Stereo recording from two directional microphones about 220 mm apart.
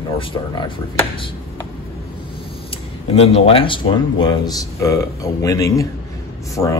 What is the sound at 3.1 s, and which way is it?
Speech, 25° left (ahead or behind).